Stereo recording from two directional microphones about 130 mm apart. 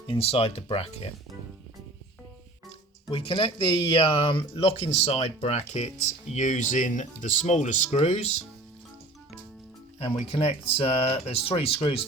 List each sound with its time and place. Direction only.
0.1 s speech: 45° left (ahead or behind)
3.1 s speech: 45° left (ahead or behind)
10.0 s speech: 45° left (ahead or behind)